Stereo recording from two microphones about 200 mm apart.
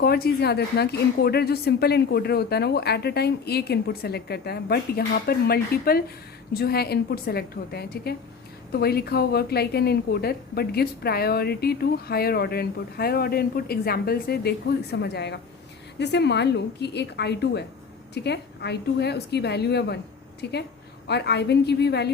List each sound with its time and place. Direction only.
0.0 s a woman's voice: 50° left (ahead or behind)